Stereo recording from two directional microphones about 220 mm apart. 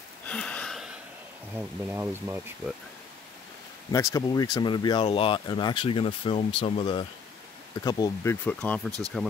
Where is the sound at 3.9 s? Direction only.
15° left (ahead or behind).